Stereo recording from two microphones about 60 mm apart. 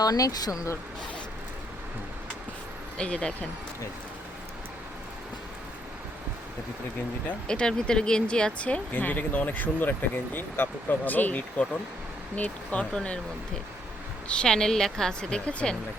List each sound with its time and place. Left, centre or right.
0.0 s speech: left
3.0 s speech: centre
7.4 s speech: centre
8.9 s speech: left
12.9 s speech: centre
14.3 s speech: centre